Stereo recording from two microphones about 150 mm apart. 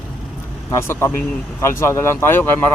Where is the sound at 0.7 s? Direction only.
20° left (ahead or behind).